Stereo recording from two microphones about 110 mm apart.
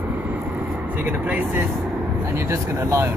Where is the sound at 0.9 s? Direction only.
15° right (ahead or behind).